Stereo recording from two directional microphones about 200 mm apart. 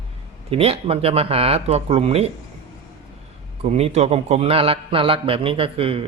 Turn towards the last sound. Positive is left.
turn(degrees=-30)  # may be behind; listen again after turning